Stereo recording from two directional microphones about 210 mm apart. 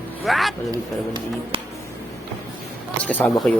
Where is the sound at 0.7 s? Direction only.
20° right (ahead or behind).